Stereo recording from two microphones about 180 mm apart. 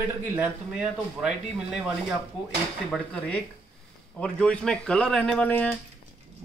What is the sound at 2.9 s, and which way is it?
Speech, 5° left (ahead or behind).